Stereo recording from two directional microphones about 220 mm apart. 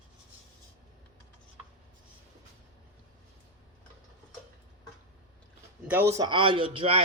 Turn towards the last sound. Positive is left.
turn(degrees=-25)  # may be behind; listen again after turning